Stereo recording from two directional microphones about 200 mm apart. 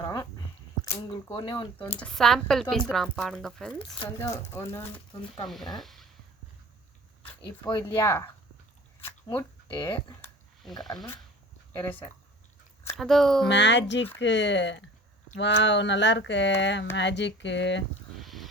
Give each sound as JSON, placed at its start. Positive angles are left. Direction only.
{"t": 0.8, "sound": "speech", "side_deg": 20}
{"t": 2.0, "sound": "speech", "side_deg": 5}
{"t": 5.5, "sound": "speech", "side_deg": 0}
{"t": 7.4, "sound": "speech", "side_deg": 20}
{"t": 9.3, "sound": "speech", "side_deg": 15}
{"t": 10.6, "sound": "speech", "side_deg": 0}
{"t": 13.0, "sound": "speech", "side_deg": 0}
{"t": 13.5, "sound": "speech", "side_deg": 60}
{"t": 18.2, "sound": "music", "side_deg": 0}